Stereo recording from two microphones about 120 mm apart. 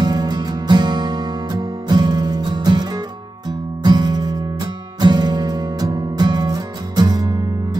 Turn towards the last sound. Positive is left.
turn(degrees=-35)  # may be behind; listen again after turning